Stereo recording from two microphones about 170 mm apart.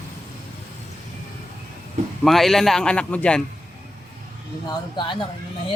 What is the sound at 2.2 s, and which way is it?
Speech, centre (ahead or behind).